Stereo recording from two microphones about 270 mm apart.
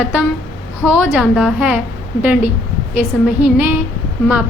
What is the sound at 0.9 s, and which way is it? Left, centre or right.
A woman's voice, centre.